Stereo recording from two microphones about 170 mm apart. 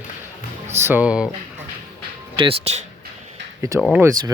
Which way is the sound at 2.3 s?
35° right (ahead or behind).